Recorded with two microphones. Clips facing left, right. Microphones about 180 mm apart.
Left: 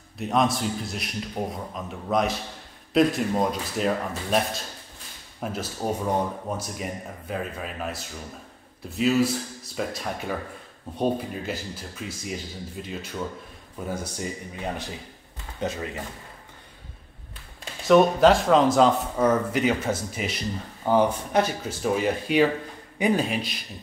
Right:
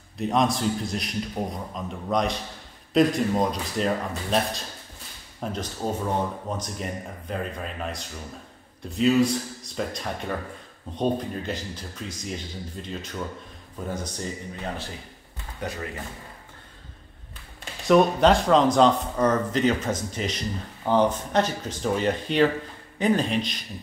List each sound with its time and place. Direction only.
0.2 s a man's voice: centre (ahead or behind)
5.4 s a man's voice: 5° left (ahead or behind)
17.8 s speech: centre (ahead or behind)